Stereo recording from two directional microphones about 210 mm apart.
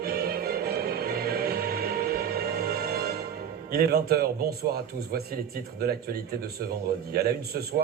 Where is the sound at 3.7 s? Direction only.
50° right (ahead or behind).